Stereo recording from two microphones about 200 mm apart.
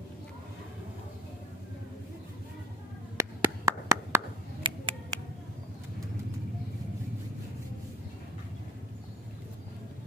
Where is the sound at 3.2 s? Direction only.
15° right (ahead or behind).